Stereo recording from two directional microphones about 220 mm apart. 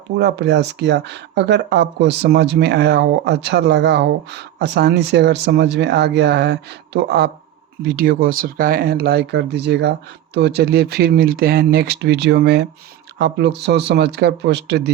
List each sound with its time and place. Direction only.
0.2 s speech: 50° right (ahead or behind)